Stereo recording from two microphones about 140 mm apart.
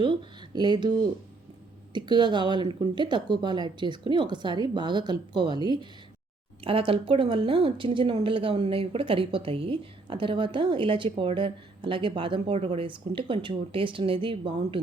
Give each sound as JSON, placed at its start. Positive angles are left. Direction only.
{"t": 0.0, "sound": "speech", "side_deg": -35}